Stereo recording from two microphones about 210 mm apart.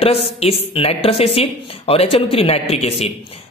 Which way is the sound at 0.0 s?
30° left (ahead or behind).